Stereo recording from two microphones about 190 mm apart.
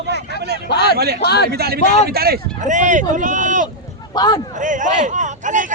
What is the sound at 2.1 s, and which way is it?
Speech, 55° right (ahead or behind).